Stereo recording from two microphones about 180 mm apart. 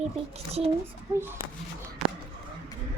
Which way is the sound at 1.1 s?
10° right (ahead or behind).